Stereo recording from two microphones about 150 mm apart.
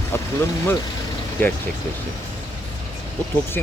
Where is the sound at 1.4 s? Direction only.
15° left (ahead or behind).